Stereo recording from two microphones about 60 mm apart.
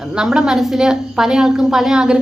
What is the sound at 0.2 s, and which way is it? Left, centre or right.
A woman's voice, centre.